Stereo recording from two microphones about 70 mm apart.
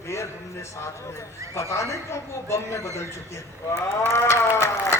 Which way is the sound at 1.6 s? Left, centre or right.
Left.